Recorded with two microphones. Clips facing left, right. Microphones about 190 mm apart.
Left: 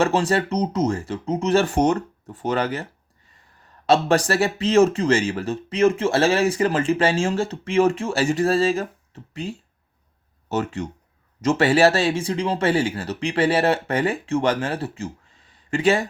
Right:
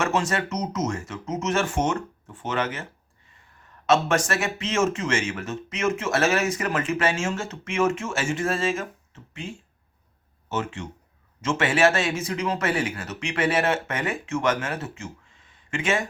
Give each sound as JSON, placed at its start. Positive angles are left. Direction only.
{"t": 0.0, "sound": "speech", "side_deg": 35}
{"t": 3.8, "sound": "speech", "side_deg": 35}